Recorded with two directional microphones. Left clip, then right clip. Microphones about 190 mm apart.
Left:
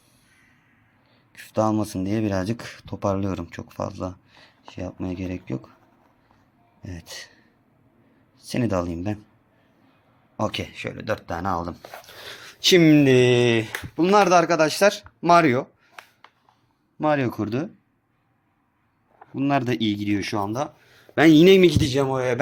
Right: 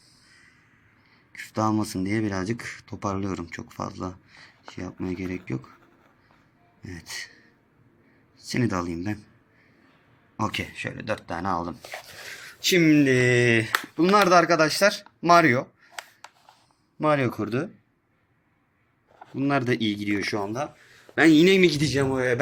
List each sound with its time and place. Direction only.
1.3 s speech: 5° left (ahead or behind)
2.2 s speech: 15° left (ahead or behind)
8.4 s speech: 10° left (ahead or behind)
10.3 s speech: 10° left (ahead or behind)
11.9 s speech: 15° left (ahead or behind)
17.0 s speech: 5° left (ahead or behind)
19.4 s speech: 5° left (ahead or behind)